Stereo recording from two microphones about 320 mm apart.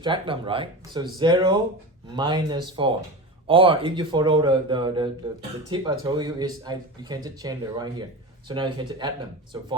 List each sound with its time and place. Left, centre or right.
0.0 s speech: centre